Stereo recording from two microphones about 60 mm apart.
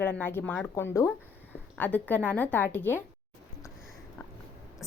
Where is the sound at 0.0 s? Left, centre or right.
Left.